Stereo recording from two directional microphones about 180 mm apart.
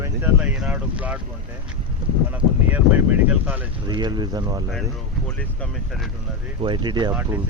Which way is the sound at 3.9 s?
25° right (ahead or behind).